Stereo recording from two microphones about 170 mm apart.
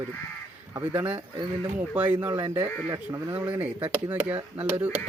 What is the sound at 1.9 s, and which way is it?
Speech, 10° right (ahead or behind).